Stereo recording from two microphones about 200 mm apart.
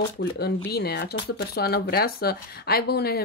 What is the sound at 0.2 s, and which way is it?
Speech, 55° left (ahead or behind).